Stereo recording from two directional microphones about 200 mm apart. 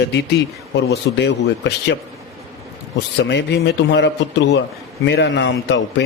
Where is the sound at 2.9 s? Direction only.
60° left (ahead or behind).